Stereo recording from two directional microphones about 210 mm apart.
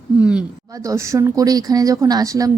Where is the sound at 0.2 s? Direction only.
5° right (ahead or behind).